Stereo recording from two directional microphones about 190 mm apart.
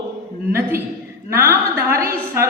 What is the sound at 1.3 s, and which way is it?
Speech, 15° right (ahead or behind).